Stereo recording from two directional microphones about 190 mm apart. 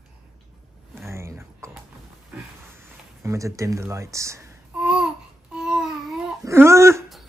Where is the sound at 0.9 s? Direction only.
15° right (ahead or behind).